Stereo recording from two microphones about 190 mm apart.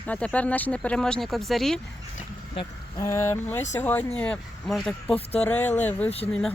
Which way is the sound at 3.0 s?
15° left (ahead or behind).